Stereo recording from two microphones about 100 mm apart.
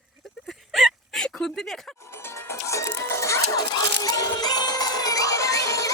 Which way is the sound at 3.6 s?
45° left (ahead or behind).